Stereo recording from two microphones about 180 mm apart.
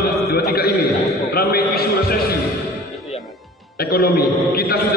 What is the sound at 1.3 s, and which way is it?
Speech, 60° left (ahead or behind).